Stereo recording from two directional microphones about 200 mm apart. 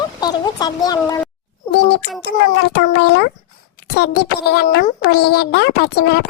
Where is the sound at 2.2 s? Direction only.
55° left (ahead or behind).